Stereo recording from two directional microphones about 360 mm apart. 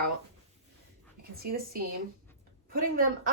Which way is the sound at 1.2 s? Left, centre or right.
Right.